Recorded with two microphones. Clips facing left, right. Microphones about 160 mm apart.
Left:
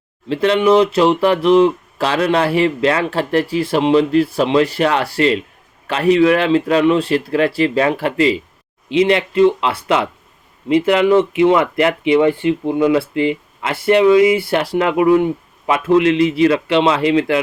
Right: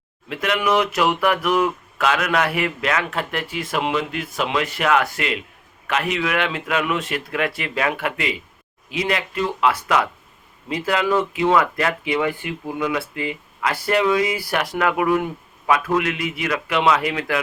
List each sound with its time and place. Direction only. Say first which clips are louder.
0.3 s speech: left 8 dB; 30° left (ahead or behind)